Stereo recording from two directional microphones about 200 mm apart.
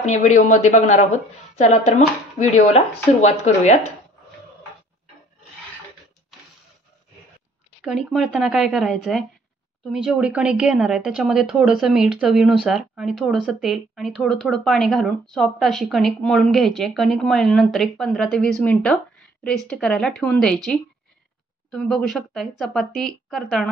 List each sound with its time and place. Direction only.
0.0 s speech: 35° left (ahead or behind)
7.8 s speech: centre (ahead or behind)